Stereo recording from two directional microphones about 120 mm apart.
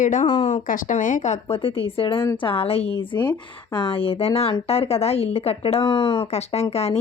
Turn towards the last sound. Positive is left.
turn(degrees=60)  # may be behind; listen again after turning